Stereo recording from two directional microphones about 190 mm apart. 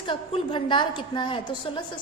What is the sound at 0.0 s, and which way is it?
A woman's voice, 25° left (ahead or behind).